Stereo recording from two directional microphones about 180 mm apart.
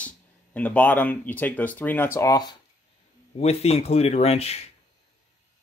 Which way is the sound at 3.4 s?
35° left (ahead or behind).